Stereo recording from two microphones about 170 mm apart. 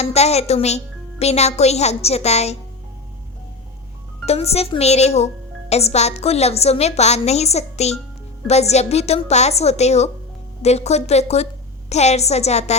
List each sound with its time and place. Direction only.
0.0 s speech: 40° left (ahead or behind)
4.3 s speech: 35° left (ahead or behind)